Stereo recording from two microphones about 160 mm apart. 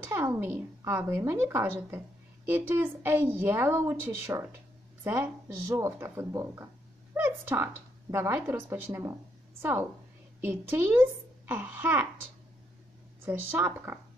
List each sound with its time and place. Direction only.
0.0 s a woman's voice: 15° right (ahead or behind)
13.2 s a woman's voice: 15° right (ahead or behind)